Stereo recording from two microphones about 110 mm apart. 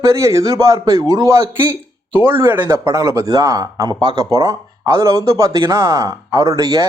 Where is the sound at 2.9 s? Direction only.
30° right (ahead or behind).